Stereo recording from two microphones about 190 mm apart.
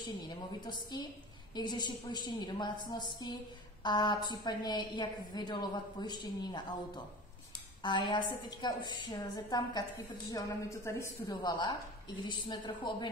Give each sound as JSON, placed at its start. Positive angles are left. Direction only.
{"t": 0.7, "sound": "a woman's voice", "side_deg": 25}
{"t": 7.8, "sound": "a woman's voice", "side_deg": 25}